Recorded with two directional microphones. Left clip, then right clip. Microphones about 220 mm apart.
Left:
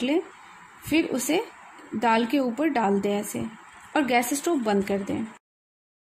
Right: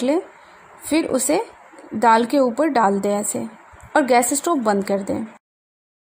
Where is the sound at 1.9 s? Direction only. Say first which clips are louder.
Right 8 dB; 25° right (ahead or behind).